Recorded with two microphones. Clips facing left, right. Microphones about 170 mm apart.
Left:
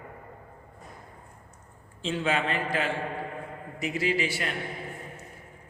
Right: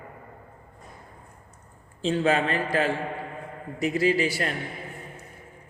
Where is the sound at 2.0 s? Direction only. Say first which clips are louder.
Right 5 dB; 40° right (ahead or behind).